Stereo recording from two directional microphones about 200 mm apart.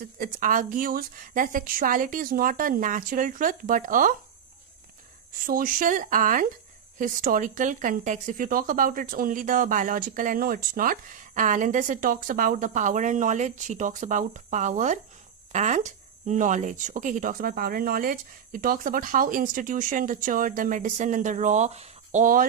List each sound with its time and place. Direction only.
0.2 s speech: 40° right (ahead or behind)
5.5 s speech: 45° right (ahead or behind)